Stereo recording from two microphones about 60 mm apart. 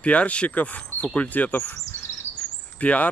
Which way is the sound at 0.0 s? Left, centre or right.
Left.